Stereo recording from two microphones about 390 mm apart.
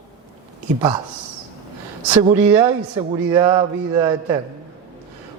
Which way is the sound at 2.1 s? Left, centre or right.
Centre.